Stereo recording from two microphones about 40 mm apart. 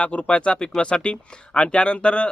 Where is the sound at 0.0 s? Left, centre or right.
Left.